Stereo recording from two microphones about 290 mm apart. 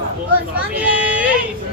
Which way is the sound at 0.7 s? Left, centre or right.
Centre.